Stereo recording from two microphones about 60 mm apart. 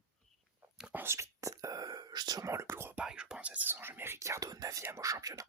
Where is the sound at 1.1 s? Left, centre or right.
Right.